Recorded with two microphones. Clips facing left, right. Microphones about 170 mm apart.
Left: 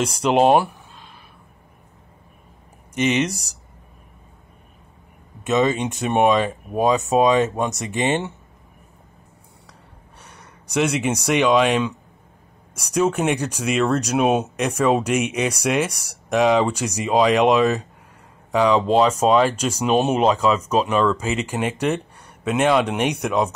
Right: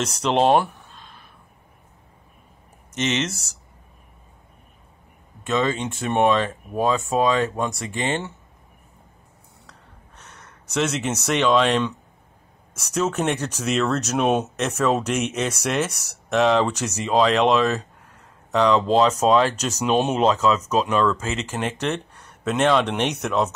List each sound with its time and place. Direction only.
0.2 s speech: 10° left (ahead or behind)
2.9 s speech: 10° left (ahead or behind)
5.4 s speech: 20° left (ahead or behind)
9.7 s a sound: 10° left (ahead or behind)
12.7 s speech: 10° left (ahead or behind)